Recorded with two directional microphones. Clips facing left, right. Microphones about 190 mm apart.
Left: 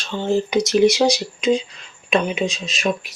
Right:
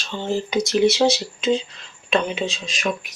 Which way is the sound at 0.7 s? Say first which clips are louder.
Left 1 dB; 15° left (ahead or behind).